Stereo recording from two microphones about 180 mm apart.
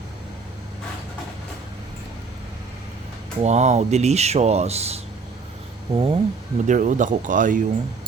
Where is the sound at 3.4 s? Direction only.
40° right (ahead or behind).